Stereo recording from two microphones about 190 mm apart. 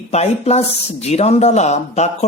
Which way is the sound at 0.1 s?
35° left (ahead or behind).